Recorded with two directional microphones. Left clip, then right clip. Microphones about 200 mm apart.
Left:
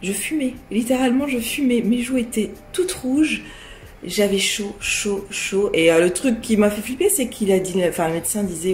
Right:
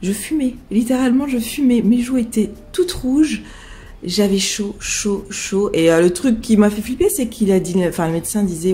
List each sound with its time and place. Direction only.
0.0 s speech: 25° right (ahead or behind)